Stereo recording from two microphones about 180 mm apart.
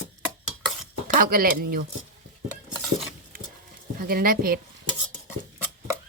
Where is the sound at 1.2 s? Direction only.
55° right (ahead or behind).